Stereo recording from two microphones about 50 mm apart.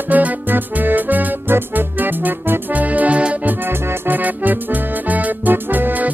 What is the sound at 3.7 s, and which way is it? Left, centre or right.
Music, right.